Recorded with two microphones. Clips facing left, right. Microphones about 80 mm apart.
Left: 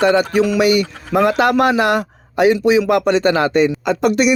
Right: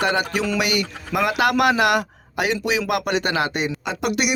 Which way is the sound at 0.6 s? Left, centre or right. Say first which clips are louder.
Left 8 dB; left.